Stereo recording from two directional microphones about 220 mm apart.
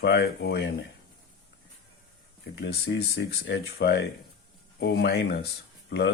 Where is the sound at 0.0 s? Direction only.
50° left (ahead or behind).